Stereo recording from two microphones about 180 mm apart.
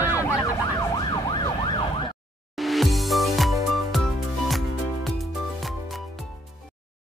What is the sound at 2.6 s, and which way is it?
Music, centre (ahead or behind).